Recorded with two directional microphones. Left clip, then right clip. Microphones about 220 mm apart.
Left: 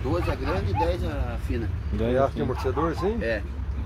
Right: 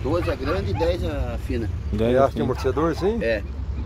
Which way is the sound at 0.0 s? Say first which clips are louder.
Right 4 dB; 15° right (ahead or behind).